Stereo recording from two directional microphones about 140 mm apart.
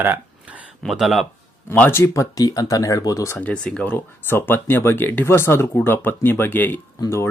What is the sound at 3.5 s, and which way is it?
Speech, 5° left (ahead or behind).